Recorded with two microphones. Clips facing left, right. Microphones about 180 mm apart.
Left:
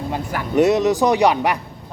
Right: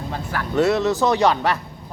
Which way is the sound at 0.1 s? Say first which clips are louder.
Left 2 dB; 15° left (ahead or behind).